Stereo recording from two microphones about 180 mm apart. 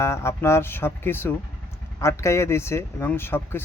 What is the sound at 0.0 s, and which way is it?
Speech, 15° left (ahead or behind).